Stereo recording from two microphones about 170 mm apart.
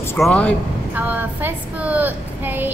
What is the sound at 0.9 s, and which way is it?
A woman's voice, 10° right (ahead or behind).